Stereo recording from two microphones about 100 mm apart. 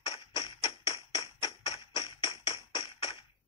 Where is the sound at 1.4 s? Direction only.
65° left (ahead or behind).